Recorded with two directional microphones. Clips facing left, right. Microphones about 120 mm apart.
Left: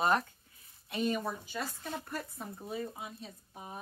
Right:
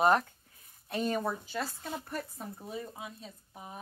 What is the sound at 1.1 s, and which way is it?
Speech, 40° right (ahead or behind).